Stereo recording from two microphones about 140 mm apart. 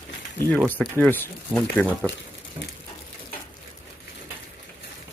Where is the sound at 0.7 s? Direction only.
10° left (ahead or behind).